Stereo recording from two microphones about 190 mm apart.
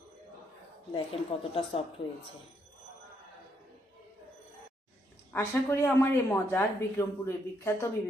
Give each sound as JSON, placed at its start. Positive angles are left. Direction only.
{"t": 0.9, "sound": "a woman's voice", "side_deg": 30}
{"t": 5.3, "sound": "speech", "side_deg": 15}